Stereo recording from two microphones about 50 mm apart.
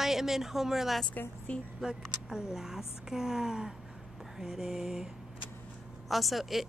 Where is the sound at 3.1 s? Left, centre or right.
Centre.